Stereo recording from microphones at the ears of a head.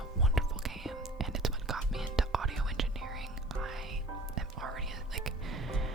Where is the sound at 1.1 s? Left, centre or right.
Right.